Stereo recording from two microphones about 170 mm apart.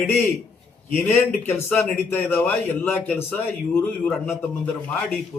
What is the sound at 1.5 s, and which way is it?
A man's voice, 10° left (ahead or behind).